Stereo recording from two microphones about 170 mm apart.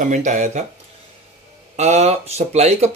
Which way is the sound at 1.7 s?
40° right (ahead or behind).